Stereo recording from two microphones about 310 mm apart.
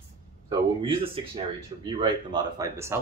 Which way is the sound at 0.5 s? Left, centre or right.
Centre.